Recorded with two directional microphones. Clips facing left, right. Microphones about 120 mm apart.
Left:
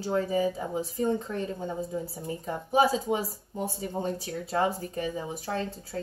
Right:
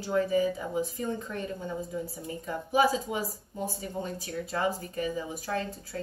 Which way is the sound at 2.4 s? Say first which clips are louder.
Left 1 dB; 30° left (ahead or behind).